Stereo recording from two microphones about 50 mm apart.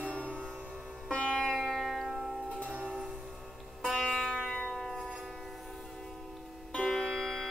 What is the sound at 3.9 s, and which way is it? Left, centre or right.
Music, centre.